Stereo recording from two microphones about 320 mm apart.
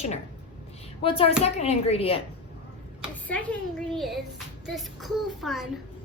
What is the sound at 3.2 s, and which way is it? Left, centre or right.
A child's voice, centre.